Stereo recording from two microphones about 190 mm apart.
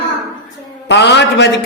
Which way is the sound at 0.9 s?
65° left (ahead or behind).